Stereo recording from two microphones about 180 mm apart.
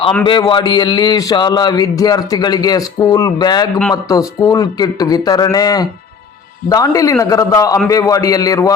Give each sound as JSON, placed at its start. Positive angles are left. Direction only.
{"t": 0.3, "sound": "a man's voice", "side_deg": 25}